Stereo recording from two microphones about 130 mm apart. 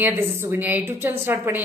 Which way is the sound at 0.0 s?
20° right (ahead or behind).